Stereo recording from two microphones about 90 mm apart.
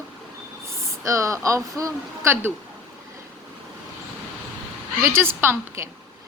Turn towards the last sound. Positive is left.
turn(degrees=-25)  # may be behind; listen again after turning